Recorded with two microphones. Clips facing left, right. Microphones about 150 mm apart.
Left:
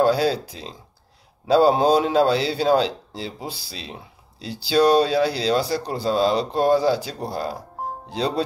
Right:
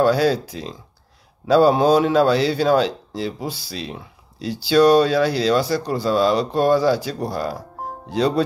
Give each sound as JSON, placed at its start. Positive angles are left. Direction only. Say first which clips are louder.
{"t": 0.1, "sound": "speech", "louder": "right 3 dB", "side_deg": 30}